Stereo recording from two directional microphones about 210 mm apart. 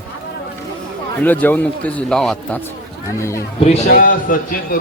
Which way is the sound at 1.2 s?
10° left (ahead or behind).